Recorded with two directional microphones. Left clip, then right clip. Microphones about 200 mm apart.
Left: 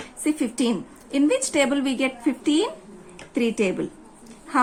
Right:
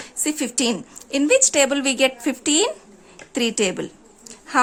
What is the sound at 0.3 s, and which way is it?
A woman's voice, 40° right (ahead or behind).